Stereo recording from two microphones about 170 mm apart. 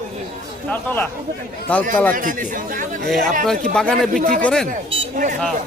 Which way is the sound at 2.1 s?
50° right (ahead or behind).